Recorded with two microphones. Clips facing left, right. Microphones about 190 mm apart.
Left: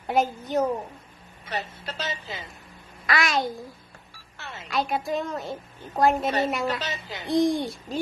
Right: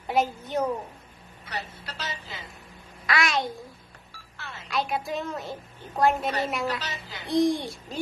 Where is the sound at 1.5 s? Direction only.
25° left (ahead or behind).